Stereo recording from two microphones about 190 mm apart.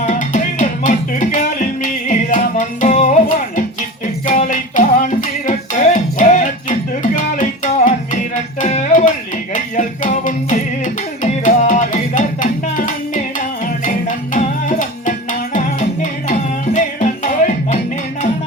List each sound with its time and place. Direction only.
0.0 s music: 40° left (ahead or behind)
14.3 s music: 45° left (ahead or behind)